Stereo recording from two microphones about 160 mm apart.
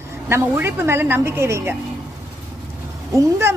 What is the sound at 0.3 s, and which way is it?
A woman's voice, 15° right (ahead or behind).